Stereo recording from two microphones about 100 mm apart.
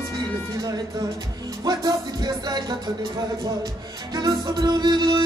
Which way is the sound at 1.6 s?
40° right (ahead or behind).